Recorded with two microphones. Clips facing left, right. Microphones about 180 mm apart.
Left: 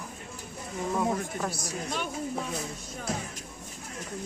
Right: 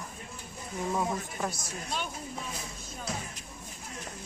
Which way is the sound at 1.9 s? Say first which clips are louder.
Left 4 dB; 60° left (ahead or behind).